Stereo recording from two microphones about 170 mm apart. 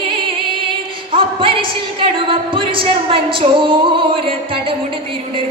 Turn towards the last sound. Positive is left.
turn(degrees=-30)  # may be behind; listen again after turning